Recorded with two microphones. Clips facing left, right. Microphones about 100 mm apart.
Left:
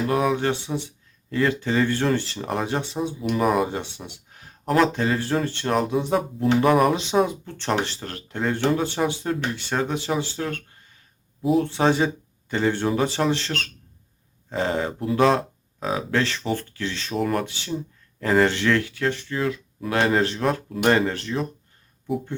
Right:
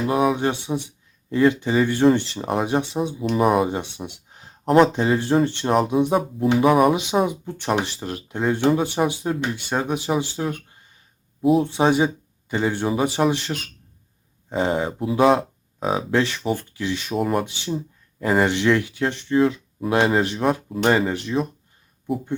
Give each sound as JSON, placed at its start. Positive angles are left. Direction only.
{"t": 0.1, "sound": "speech", "side_deg": -15}
{"t": 3.4, "sound": "speech", "side_deg": -5}
{"t": 3.7, "sound": "speech", "side_deg": -15}
{"t": 6.6, "sound": "speech", "side_deg": -5}
{"t": 6.9, "sound": "speech", "side_deg": -15}
{"t": 11.6, "sound": "speech", "side_deg": -15}
{"t": 15.8, "sound": "speech", "side_deg": -25}
{"t": 17.4, "sound": "speech", "side_deg": -20}